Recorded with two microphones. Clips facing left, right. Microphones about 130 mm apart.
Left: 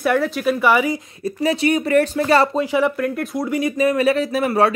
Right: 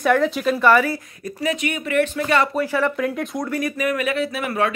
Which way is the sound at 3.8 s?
30° left (ahead or behind).